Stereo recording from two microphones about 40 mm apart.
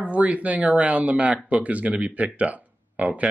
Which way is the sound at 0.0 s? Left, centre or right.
Right.